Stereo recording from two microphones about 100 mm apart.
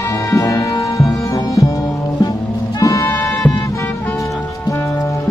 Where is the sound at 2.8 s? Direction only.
35° left (ahead or behind).